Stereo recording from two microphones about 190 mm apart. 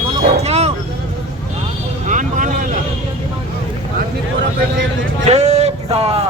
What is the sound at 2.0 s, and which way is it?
Vehicle, 40° right (ahead or behind).